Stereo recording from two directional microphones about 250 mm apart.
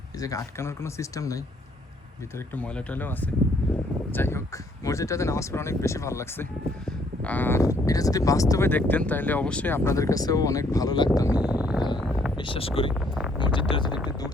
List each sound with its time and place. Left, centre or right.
0.2 s speech: centre
2.6 s speech: centre
7.3 s speech: centre
11.3 s a sound: centre
12.4 s speech: left
12.9 s a sound: centre
13.4 s speech: centre